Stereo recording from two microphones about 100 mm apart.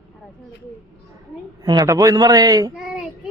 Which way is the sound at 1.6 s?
45° right (ahead or behind).